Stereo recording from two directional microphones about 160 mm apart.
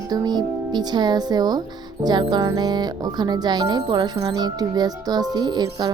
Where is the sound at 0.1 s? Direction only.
25° right (ahead or behind).